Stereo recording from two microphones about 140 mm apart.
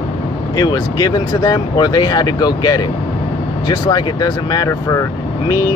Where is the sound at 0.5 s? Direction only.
30° left (ahead or behind).